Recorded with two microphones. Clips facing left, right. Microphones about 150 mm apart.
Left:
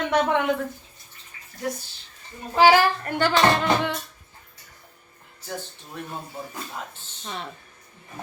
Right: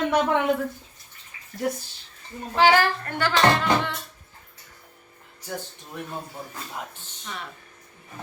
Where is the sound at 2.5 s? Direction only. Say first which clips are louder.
Left 2 dB; 5° left (ahead or behind).